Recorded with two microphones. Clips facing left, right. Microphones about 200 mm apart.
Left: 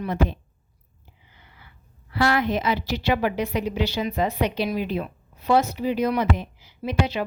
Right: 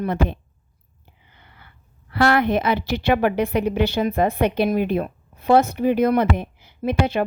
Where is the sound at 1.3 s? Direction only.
60° right (ahead or behind).